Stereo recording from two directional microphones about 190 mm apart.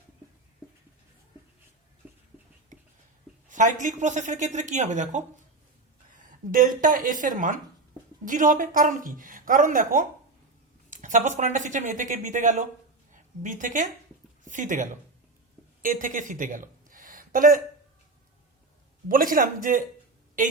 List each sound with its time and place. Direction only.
2.0 s writing: 10° right (ahead or behind)
2.7 s whispering: 40° right (ahead or behind)
3.5 s a woman's voice: 40° right (ahead or behind)
13.1 s a sound: 40° right (ahead or behind)
14.4 s a woman's voice: 40° right (ahead or behind)
19.0 s a woman's voice: 45° right (ahead or behind)